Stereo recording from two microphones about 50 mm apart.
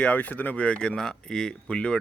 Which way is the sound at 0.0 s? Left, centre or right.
Left.